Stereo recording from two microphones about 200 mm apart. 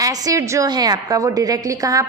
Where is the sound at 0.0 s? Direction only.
20° right (ahead or behind).